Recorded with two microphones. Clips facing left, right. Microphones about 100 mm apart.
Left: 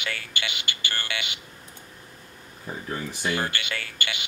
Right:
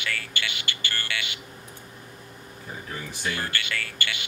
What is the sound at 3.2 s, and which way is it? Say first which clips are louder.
Speech: left 2 dB; 20° left (ahead or behind).